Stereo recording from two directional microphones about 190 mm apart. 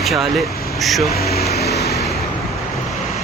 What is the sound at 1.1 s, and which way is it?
Speech, 55° left (ahead or behind).